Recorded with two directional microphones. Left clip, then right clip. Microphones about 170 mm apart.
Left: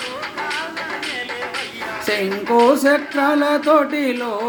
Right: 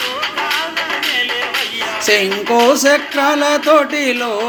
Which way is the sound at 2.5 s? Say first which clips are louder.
Right 2 dB; 20° left (ahead or behind).